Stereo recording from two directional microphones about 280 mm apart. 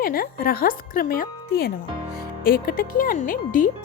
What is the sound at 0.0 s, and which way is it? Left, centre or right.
Speech, left.